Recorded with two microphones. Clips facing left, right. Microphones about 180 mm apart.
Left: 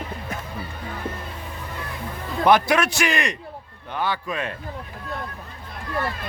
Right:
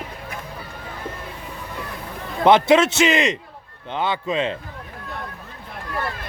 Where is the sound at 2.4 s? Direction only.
25° right (ahead or behind).